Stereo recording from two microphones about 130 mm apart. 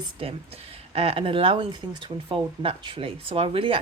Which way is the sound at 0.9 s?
50° right (ahead or behind).